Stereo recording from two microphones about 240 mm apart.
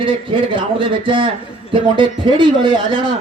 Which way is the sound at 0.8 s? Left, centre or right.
Right.